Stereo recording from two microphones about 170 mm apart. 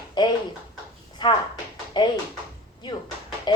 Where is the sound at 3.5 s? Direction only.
25° left (ahead or behind).